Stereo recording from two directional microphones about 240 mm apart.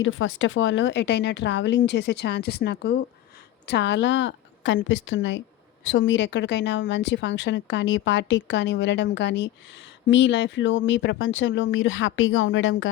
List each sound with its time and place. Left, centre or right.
0.0 s speech: left